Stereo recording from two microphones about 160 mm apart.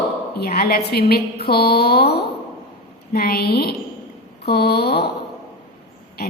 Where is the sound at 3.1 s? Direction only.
70° left (ahead or behind).